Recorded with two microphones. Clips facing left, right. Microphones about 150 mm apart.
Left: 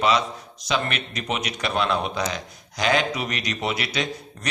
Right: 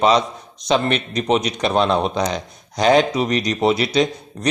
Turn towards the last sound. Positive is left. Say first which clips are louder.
# right 10 dB
turn(degrees=-35)  # may be behind; listen again after turning